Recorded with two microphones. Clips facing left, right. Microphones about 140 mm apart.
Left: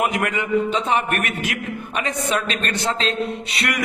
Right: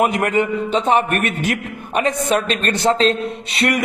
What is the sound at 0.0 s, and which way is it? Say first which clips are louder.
A man's voice: right 5 dB; 35° right (ahead or behind).